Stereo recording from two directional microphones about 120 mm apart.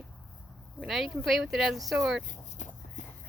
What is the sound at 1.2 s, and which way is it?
Speech, centre (ahead or behind).